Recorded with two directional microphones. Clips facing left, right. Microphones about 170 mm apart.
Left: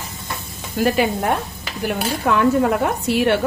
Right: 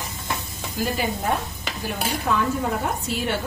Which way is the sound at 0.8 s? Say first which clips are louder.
Left 8 dB; 65° left (ahead or behind).